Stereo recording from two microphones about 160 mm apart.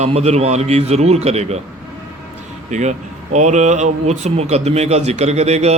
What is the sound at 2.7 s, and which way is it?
Mantra, 50° right (ahead or behind).